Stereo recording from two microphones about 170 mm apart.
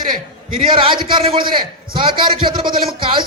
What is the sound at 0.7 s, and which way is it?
A man's voice, 30° right (ahead or behind).